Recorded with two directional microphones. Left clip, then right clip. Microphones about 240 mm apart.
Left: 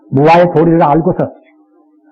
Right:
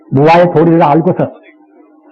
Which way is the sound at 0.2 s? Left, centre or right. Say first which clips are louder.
Right 1 dB; left.